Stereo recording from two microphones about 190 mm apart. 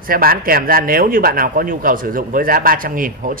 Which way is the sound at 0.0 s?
50° right (ahead or behind).